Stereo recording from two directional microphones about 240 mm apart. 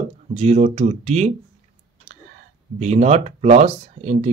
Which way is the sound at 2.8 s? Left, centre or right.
Right.